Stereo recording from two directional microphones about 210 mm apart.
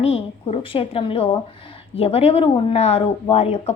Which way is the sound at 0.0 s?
30° left (ahead or behind).